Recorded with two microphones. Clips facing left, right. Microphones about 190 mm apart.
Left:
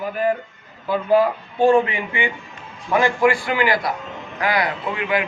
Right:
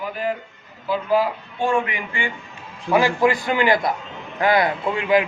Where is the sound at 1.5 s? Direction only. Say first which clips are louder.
Left 7 dB; 40° left (ahead or behind).